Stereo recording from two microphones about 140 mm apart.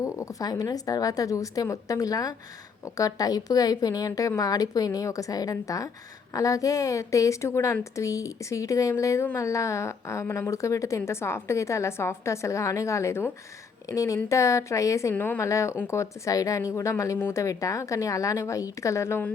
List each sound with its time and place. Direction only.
0.0 s a woman's voice: 25° left (ahead or behind)